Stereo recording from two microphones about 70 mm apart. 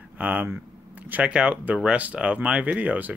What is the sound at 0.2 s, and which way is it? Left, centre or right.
Speech, right.